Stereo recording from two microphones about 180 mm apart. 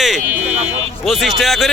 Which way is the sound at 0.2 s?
45° right (ahead or behind).